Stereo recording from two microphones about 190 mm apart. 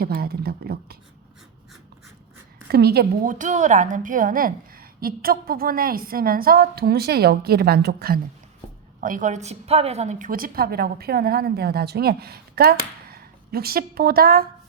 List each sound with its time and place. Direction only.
0.0 s speech: 55° right (ahead or behind)
2.6 s a woman's voice: 55° right (ahead or behind)
9.0 s a woman's voice: 45° right (ahead or behind)